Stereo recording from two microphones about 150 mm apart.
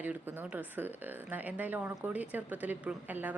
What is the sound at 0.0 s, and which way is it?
A woman's voice, 10° right (ahead or behind).